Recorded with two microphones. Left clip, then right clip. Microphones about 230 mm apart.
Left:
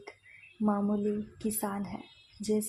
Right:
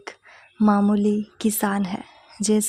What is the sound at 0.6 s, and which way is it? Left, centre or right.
Speech, right.